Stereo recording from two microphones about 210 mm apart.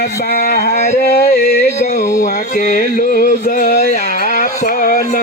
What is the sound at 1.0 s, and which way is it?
Music, 45° left (ahead or behind).